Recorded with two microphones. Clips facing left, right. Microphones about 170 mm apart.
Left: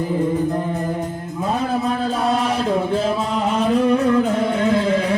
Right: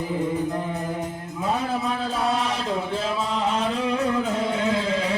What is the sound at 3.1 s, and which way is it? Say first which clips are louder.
Music: left 4 dB; 50° left (ahead or behind).